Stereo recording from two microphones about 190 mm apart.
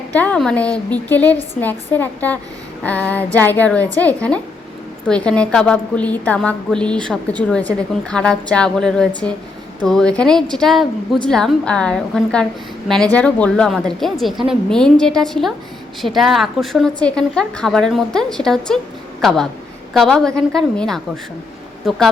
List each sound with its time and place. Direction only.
0.1 s a woman's voice: 10° left (ahead or behind)